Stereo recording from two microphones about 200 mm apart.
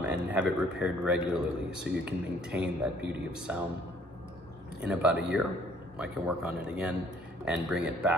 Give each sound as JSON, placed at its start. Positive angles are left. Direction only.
{"t": 0.0, "sound": "a man's voice", "side_deg": -5}
{"t": 4.7, "sound": "speech", "side_deg": -5}